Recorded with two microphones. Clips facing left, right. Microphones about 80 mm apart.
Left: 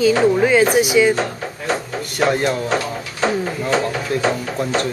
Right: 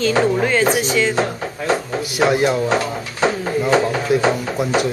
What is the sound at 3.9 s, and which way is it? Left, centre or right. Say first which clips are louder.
Speech: right 3 dB; centre.